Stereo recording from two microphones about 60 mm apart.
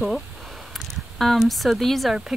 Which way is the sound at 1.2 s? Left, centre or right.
Centre.